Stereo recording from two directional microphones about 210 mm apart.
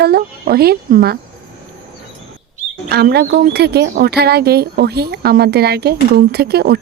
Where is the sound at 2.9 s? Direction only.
50° right (ahead or behind).